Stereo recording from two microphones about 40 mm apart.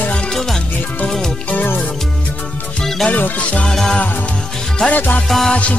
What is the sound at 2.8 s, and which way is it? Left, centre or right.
Music, centre.